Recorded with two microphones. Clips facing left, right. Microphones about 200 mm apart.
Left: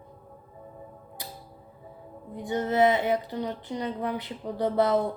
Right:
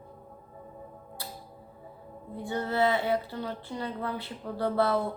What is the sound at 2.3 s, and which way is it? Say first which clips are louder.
Speech: left 4 dB; 20° left (ahead or behind).